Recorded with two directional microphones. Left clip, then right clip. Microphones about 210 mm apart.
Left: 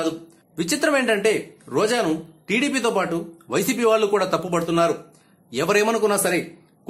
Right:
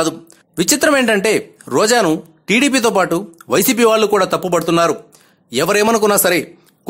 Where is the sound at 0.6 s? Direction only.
40° right (ahead or behind).